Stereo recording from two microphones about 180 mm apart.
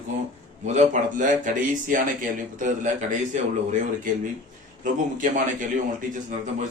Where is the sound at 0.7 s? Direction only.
45° right (ahead or behind).